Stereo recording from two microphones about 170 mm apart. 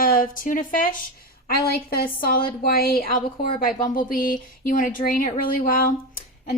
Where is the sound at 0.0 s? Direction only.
55° left (ahead or behind).